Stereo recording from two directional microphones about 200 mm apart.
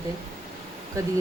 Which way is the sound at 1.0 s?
15° right (ahead or behind).